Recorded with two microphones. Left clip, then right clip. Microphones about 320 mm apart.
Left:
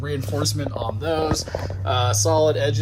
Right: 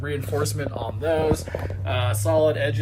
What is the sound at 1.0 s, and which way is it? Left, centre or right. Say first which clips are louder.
Speech: right 2 dB; centre.